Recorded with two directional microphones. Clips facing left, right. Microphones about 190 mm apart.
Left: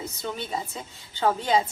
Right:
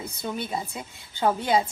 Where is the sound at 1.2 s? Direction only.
10° right (ahead or behind).